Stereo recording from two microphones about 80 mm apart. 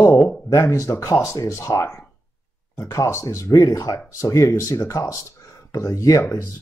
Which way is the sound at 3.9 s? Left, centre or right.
Left.